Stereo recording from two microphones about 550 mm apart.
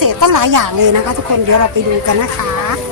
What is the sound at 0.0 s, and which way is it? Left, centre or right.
A woman's voice, right.